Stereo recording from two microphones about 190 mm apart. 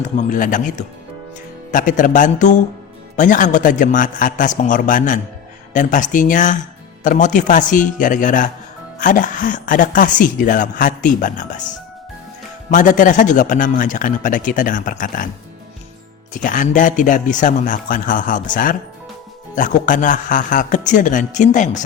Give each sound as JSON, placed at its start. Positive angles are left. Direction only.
{"t": 0.0, "sound": "speech", "side_deg": 40}
{"t": 12.7, "sound": "speech", "side_deg": 45}
{"t": 16.3, "sound": "speech", "side_deg": 45}